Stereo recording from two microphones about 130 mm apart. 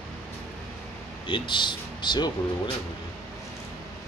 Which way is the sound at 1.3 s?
35° left (ahead or behind).